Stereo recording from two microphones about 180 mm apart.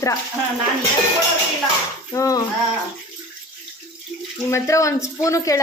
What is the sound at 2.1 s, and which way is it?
Speech, 15° left (ahead or behind).